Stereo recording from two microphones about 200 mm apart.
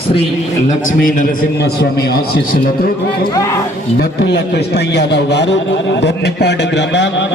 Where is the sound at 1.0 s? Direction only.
45° left (ahead or behind).